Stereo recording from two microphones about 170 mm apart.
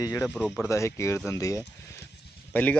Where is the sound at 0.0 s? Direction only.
20° left (ahead or behind).